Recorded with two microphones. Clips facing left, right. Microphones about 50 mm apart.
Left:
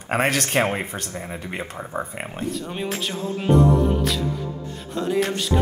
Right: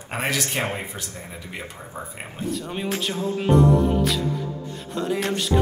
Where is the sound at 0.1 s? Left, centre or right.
Left.